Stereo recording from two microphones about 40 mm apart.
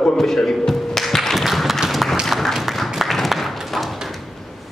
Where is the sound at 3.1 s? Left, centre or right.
Centre.